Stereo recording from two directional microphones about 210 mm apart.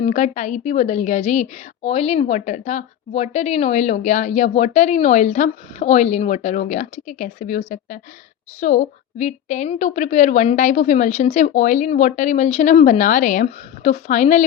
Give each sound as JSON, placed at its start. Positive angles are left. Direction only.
{"t": 0.0, "sound": "a woman's voice", "side_deg": 35}